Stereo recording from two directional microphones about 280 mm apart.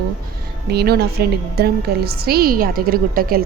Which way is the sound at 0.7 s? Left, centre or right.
Right.